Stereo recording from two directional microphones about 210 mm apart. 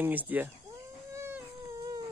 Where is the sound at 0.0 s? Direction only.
10° right (ahead or behind).